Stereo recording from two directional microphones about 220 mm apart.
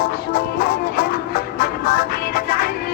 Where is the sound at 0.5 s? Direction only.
45° left (ahead or behind).